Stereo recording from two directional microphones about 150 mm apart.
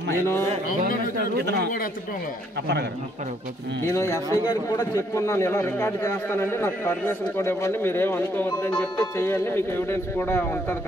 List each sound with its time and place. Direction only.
1.3 s speech: 90° right
3.8 s a man's voice: 20° left (ahead or behind)